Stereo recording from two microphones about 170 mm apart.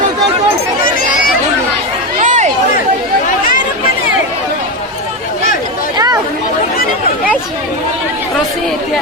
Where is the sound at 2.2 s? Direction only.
45° right (ahead or behind).